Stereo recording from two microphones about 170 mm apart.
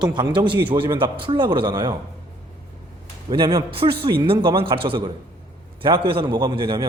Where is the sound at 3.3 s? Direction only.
25° right (ahead or behind).